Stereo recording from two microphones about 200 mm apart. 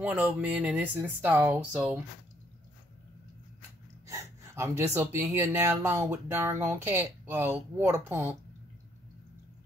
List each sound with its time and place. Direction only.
0.0 s speech: 10° right (ahead or behind)
4.1 s speech: 15° right (ahead or behind)